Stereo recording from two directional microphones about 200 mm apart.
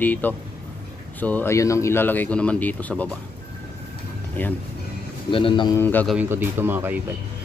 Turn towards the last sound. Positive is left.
turn(degrees=-10)  # may be behind; listen again after turning